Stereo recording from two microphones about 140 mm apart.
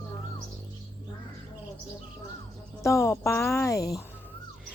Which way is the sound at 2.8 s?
20° left (ahead or behind).